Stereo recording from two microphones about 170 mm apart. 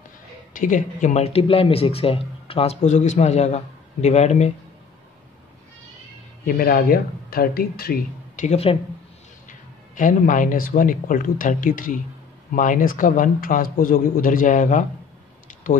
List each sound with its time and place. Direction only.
0.5 s speech: 50° left (ahead or behind)
6.4 s speech: 60° left (ahead or behind)
8.5 s speech: 35° left (ahead or behind)
9.5 s a man's voice: 50° left (ahead or behind)